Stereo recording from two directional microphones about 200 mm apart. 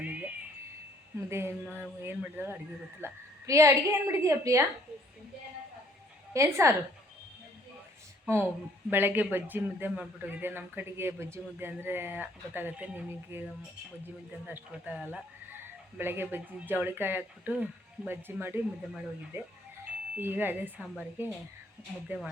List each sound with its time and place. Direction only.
0.0 s a sound: 10° right (ahead or behind)
1.3 s speech: 10° right (ahead or behind)
6.3 s speech: 15° right (ahead or behind)
8.9 s speech: 10° right (ahead or behind)